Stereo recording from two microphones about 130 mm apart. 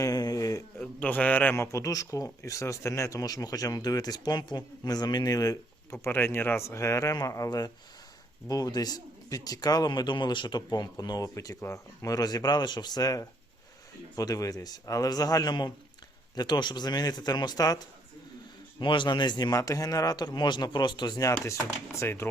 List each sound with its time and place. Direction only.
0.0 s a sound: 30° left (ahead or behind)
0.8 s a man's voice: 10° left (ahead or behind); by 17.7 s 30° left (ahead or behind)
18.8 s a man's voice: 40° left (ahead or behind); by 22.3 s 20° left (ahead or behind)